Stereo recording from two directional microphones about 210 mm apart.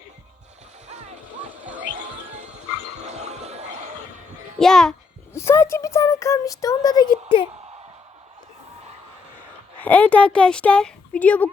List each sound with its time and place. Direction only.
3.1 s music: 30° right (ahead or behind)
4.6 s speech: centre (ahead or behind)
5.3 s speech: 15° left (ahead or behind)
9.7 s speech: 5° left (ahead or behind)